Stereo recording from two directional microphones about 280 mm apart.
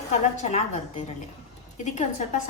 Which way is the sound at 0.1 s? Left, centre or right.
Left.